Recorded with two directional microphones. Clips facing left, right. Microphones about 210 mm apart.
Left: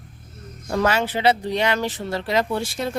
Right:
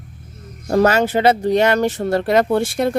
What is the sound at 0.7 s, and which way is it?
Speech, 40° right (ahead or behind).